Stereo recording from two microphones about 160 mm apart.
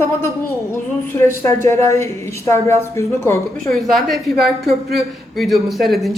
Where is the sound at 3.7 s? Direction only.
Centre (ahead or behind).